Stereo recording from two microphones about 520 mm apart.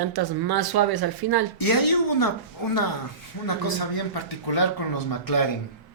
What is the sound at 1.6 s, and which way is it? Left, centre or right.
Speech, left.